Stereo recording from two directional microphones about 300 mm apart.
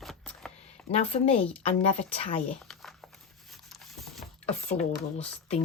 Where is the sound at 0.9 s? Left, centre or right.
Centre.